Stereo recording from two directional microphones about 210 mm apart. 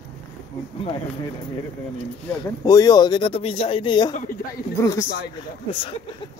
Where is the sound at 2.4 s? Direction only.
15° left (ahead or behind).